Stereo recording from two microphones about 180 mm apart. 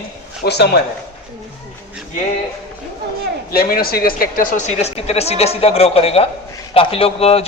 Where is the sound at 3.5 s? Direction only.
55° left (ahead or behind).